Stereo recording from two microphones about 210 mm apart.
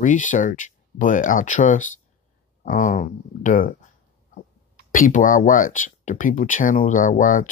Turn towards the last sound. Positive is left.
turn(degrees=40)  # may be behind; listen again after turning